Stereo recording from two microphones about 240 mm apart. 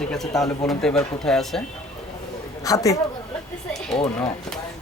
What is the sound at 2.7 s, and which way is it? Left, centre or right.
Speech, centre.